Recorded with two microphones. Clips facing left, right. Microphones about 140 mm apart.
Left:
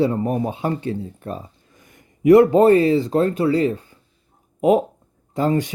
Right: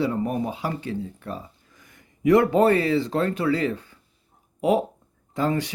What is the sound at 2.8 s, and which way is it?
Speech, 40° left (ahead or behind).